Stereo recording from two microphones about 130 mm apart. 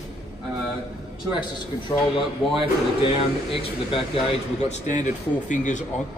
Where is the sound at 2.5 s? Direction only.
45° left (ahead or behind); by 5.8 s 75° left (ahead or behind).